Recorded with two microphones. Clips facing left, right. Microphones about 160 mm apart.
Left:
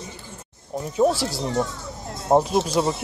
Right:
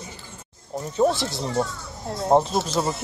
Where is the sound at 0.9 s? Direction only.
10° left (ahead or behind).